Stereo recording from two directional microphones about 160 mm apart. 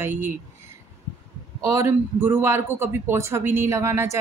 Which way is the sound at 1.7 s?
15° right (ahead or behind).